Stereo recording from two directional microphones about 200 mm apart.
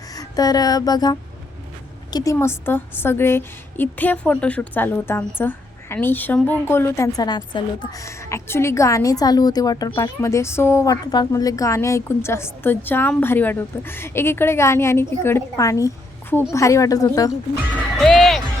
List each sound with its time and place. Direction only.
0.1 s music: 20° left (ahead or behind)
2.0 s a woman's voice: 20° left (ahead or behind)
17.9 s music: centre (ahead or behind)